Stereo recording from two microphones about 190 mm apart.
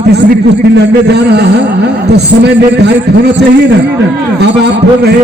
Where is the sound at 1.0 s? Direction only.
60° right (ahead or behind).